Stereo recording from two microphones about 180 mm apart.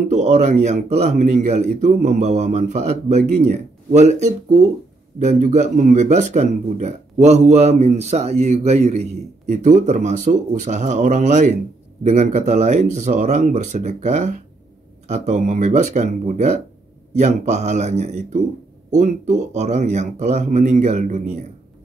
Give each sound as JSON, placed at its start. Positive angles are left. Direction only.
{"t": 0.1, "sound": "speech", "side_deg": -40}